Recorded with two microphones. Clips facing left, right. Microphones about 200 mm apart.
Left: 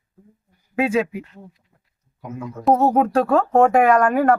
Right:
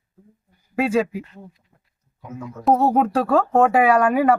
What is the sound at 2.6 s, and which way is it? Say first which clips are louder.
Speech: left 1 dB; centre (ahead or behind).